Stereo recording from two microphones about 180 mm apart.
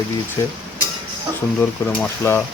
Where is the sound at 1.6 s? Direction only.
10° left (ahead or behind).